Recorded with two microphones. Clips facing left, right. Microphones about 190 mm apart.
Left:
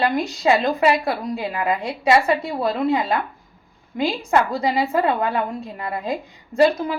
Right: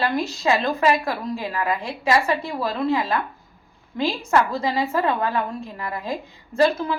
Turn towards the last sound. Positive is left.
turn(degrees=15)  # may be behind; listen again after turning